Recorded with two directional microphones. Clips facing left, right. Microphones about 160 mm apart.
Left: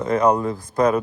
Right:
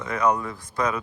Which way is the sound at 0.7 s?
50° left (ahead or behind).